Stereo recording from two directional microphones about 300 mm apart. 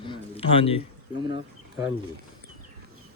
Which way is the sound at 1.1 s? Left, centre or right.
Centre.